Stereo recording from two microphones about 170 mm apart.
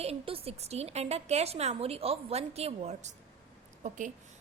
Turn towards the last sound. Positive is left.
turn(degrees=-45)  # may be behind; listen again after turning